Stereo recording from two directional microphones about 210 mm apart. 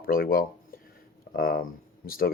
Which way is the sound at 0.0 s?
45° left (ahead or behind).